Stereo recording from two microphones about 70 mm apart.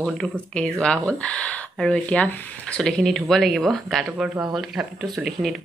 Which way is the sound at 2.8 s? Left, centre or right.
Centre.